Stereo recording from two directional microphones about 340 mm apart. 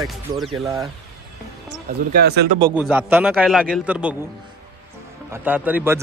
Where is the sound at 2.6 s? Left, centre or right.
Centre.